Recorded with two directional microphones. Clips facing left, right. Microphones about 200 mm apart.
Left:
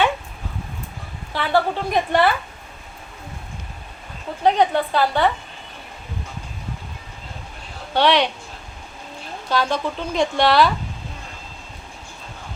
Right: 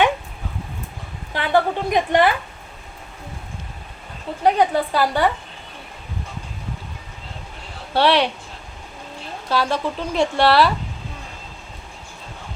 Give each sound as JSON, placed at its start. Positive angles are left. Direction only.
{"t": 1.3, "sound": "a woman's voice", "side_deg": -15}
{"t": 4.4, "sound": "a woman's voice", "side_deg": -10}
{"t": 7.9, "sound": "speech", "side_deg": -5}
{"t": 9.5, "sound": "speech", "side_deg": -5}